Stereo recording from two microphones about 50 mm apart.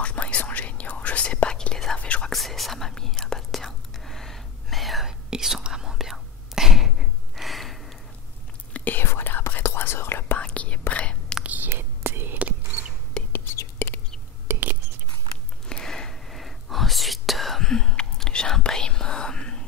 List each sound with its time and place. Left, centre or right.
0.0 s whispering: left
2.3 s whispering: centre
5.3 s whispering: centre
8.7 s whispering: left
9.0 s whispering: left
10.4 s whispering: left
11.4 s whispering: right
11.7 s whispering: right
13.2 s whispering: centre
13.8 s bird: left
14.5 s whispering: right
15.7 s whispering: centre